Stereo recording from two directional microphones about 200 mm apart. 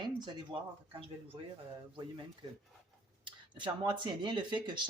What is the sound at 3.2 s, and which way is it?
Speech, 25° right (ahead or behind).